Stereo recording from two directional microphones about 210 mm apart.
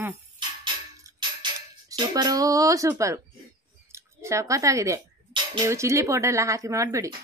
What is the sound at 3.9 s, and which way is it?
Speech, 15° right (ahead or behind).